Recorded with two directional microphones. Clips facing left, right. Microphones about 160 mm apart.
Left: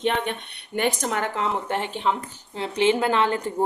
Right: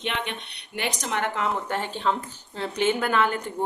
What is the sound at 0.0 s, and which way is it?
A woman's voice, 45° left (ahead or behind).